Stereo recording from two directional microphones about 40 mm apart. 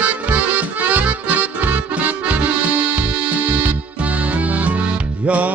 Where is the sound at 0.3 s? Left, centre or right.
Right.